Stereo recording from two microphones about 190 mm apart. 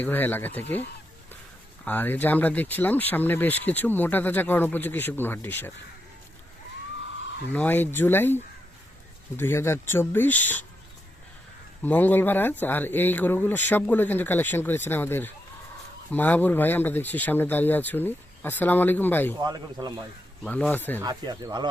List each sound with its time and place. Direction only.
0.0 s speech: 10° left (ahead or behind)
1.8 s speech: 10° left (ahead or behind)
7.5 s speech: 10° left (ahead or behind)
11.8 s speech: 10° left (ahead or behind)
19.4 s speech: 20° right (ahead or behind)
20.4 s speech: 10° left (ahead or behind)
21.0 s speech: 20° right (ahead or behind)